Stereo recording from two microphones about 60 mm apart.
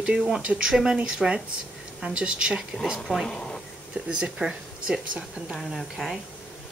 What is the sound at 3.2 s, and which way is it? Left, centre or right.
Speech, centre.